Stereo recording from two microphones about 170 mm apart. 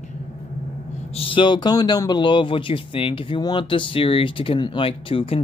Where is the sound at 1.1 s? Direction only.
30° left (ahead or behind).